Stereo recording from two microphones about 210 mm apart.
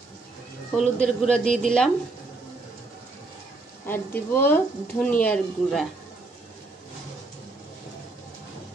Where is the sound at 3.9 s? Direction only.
10° left (ahead or behind).